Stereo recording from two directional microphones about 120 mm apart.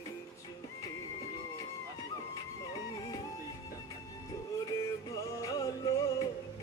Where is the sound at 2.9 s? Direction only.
30° left (ahead or behind).